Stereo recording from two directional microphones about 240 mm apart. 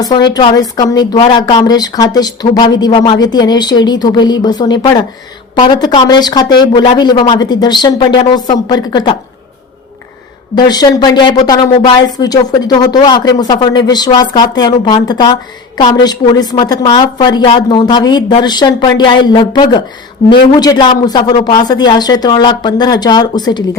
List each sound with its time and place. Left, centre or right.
0.0 s a woman's voice: centre
10.5 s a woman's voice: centre